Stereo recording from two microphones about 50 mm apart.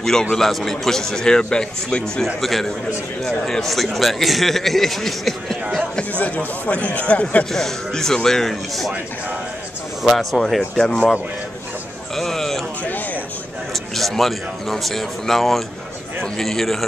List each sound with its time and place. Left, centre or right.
0.0 s a man's voice: centre
2.4 s a man's voice: centre
5.9 s speech: left
7.5 s speech: centre
10.0 s a man's voice: centre
12.2 s a sound: centre
12.8 s a sound: left
13.9 s a man's voice: centre